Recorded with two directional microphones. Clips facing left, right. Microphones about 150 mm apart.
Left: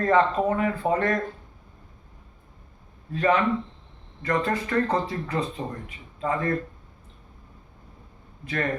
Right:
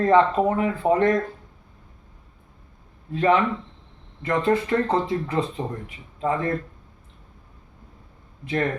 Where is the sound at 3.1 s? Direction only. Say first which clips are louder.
Right 2 dB; 25° right (ahead or behind).